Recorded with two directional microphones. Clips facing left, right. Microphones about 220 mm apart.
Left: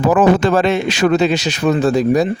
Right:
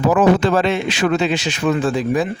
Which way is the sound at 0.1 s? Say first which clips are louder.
Left 2 dB; 45° left (ahead or behind).